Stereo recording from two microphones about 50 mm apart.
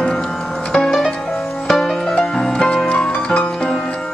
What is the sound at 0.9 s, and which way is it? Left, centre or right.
Music, centre.